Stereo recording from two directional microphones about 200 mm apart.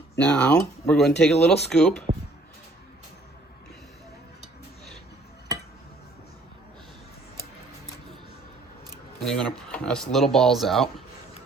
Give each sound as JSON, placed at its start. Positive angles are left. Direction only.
{"t": 0.2, "sound": "speech", "side_deg": 5}
{"t": 9.2, "sound": "speech", "side_deg": 5}